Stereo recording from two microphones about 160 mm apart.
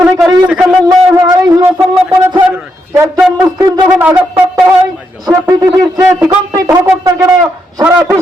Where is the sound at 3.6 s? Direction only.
15° right (ahead or behind).